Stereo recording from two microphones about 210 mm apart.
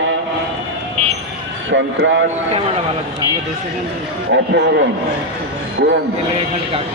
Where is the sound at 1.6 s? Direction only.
60° right (ahead or behind).